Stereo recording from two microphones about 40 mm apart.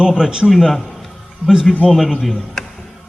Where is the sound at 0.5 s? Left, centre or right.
Centre.